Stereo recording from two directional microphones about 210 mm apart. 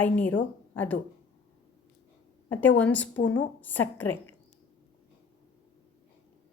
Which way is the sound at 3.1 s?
80° left.